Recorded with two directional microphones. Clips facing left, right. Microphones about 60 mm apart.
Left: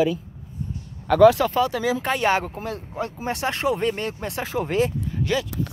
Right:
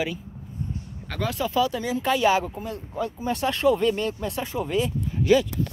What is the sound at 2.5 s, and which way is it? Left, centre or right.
Speech, left.